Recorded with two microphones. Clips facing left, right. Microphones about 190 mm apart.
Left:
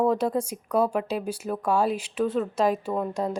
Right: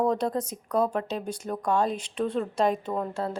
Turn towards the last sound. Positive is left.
turn(degrees=10)  # may be behind; listen again after turning